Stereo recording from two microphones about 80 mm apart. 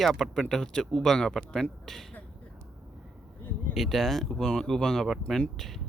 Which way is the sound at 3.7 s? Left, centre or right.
Centre.